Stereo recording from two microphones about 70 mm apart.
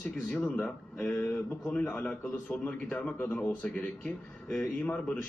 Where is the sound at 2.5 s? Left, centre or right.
Left.